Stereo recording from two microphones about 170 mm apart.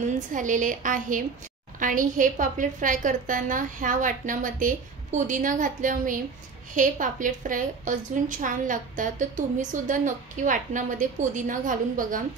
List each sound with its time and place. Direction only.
0.3 s a woman's voice: 50° right (ahead or behind)